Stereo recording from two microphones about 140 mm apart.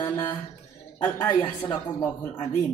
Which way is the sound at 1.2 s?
35° left (ahead or behind).